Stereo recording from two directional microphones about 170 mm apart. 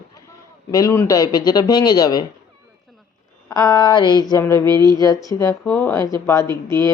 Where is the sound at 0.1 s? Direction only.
20° left (ahead or behind).